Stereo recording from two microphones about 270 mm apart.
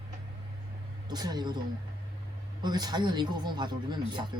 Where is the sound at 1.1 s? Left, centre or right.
Centre.